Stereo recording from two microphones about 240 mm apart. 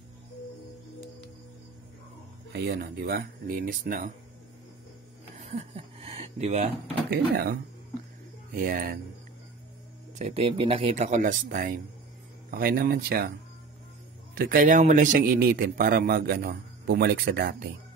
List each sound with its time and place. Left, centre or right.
2.5 s a man's voice: right
5.3 s a sound: right
7.1 s a man's voice: right
8.5 s a man's voice: right
10.1 s a man's voice: right
14.3 s a man's voice: right